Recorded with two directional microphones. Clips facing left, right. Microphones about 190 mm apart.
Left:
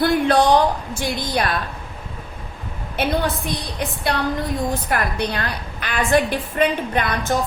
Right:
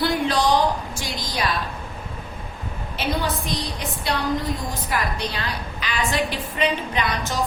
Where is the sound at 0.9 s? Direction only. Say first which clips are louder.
Left 6 dB; 55° left (ahead or behind).